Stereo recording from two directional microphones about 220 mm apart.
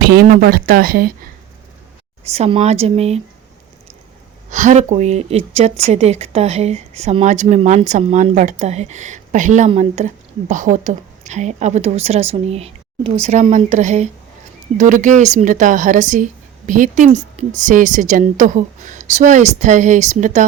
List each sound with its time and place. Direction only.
0.1 s speech: 45° right (ahead or behind)
2.2 s speech: 30° right (ahead or behind)
4.4 s speech: 35° right (ahead or behind)